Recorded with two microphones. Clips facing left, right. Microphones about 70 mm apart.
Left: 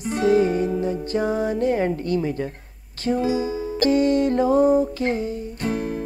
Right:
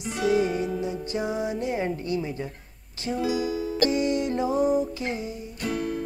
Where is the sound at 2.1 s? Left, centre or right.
Left.